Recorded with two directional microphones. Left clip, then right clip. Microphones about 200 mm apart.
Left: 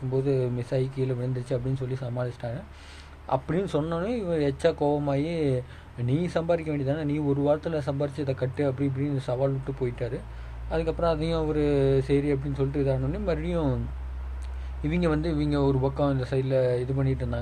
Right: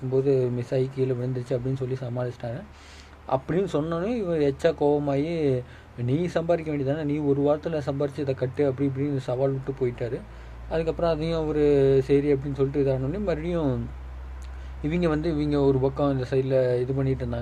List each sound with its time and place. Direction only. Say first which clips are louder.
0.1 s speech: right 4 dB; 5° right (ahead or behind)
14.8 s speech: right 2 dB; 5° right (ahead or behind)